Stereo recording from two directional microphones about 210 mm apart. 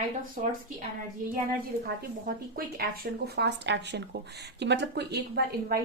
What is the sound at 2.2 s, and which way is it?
Speech, 45° right (ahead or behind).